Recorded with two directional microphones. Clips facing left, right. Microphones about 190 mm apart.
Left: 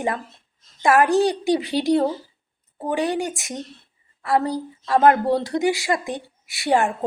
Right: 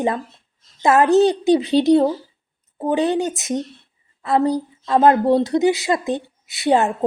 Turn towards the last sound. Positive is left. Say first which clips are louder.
# right 3 dB
turn(degrees=-20)  # may be behind; listen again after turning